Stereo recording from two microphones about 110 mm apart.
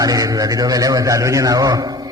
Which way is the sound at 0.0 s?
35° right (ahead or behind).